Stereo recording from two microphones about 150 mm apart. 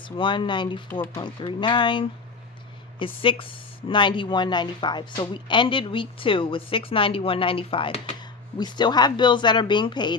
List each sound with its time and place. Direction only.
0.0 s speech: 35° left (ahead or behind)
3.2 s speech: 35° left (ahead or behind)